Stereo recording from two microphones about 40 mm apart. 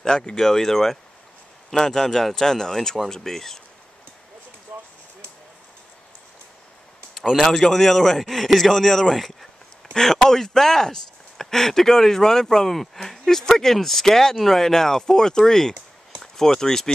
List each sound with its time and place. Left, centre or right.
0.0 s speech: centre
4.7 s a sound: right
7.2 s speech: centre